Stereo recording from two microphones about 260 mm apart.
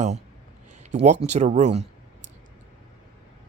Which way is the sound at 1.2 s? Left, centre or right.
Right.